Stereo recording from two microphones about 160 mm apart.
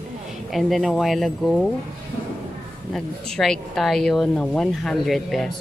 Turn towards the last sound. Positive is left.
turn(degrees=0)  # may be behind; listen again after turning